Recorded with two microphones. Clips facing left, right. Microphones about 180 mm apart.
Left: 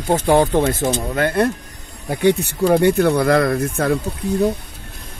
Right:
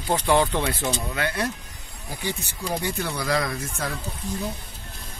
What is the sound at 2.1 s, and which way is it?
Speech, 65° left (ahead or behind).